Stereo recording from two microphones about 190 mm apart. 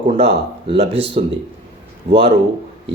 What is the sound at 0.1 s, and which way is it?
Speech, 30° right (ahead or behind).